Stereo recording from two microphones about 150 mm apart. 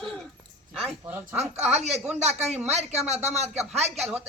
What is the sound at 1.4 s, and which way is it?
Speech, 45° right (ahead or behind).